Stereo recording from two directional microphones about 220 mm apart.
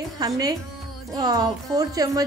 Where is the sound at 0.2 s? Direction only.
15° right (ahead or behind).